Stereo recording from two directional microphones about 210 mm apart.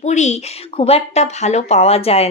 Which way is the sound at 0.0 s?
35° left (ahead or behind).